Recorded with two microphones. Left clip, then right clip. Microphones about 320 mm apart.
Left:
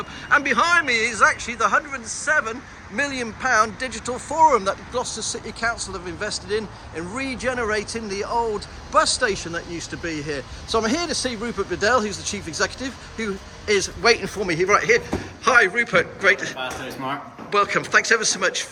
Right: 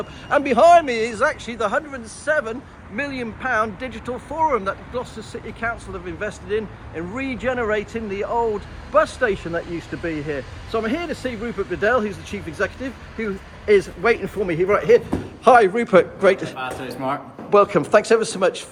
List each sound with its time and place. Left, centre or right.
0.3 s a man's voice: centre
16.6 s speech: centre
17.5 s a man's voice: centre